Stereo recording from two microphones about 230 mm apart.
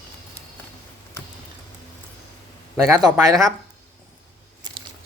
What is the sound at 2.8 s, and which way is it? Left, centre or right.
Speech, centre.